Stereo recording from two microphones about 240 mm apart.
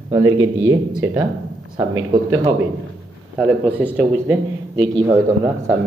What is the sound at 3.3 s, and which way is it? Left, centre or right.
Speech, centre.